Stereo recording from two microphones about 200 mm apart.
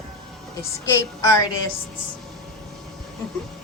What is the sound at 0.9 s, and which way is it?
Speech, 15° left (ahead or behind).